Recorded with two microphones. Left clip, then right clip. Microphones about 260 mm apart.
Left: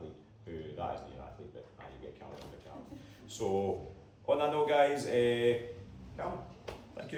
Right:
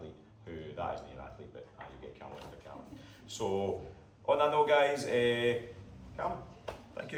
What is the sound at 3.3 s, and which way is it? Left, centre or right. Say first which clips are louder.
Speech: left 1 dB; centre.